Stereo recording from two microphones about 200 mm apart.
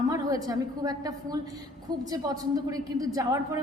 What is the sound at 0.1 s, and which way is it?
A woman's voice, 15° right (ahead or behind).